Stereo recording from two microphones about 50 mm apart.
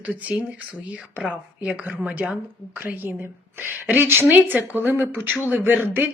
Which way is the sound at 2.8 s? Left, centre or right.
Right.